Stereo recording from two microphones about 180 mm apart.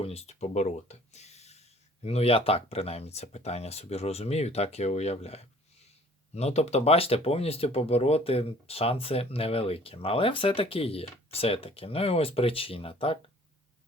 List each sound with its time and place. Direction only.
0.0 s speech: 35° left (ahead or behind)